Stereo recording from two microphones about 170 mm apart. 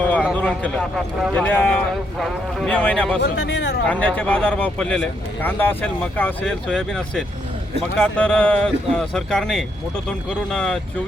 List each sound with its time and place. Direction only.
0.0 s a sound: 10° left (ahead or behind)
0.3 s speech: 5° left (ahead or behind)
3.2 s speech: 90° left
3.8 s speech: 10° left (ahead or behind)